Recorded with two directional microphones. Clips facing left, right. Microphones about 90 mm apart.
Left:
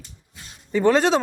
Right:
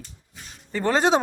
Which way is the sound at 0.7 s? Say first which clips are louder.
Left 3 dB; centre (ahead or behind).